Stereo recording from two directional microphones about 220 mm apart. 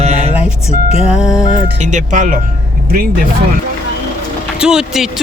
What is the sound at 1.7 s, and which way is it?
Speech, 35° right (ahead or behind).